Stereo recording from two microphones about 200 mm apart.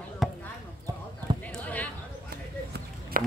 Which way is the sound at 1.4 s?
5° left (ahead or behind).